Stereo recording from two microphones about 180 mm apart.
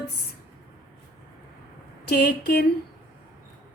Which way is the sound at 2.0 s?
65° left (ahead or behind).